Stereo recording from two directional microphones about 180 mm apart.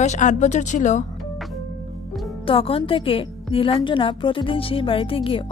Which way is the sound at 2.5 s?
30° left (ahead or behind).